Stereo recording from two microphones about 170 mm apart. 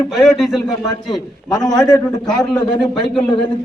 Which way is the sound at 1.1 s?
25° left (ahead or behind).